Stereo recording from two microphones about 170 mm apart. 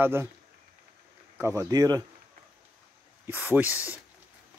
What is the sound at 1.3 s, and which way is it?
Speech, 15° right (ahead or behind).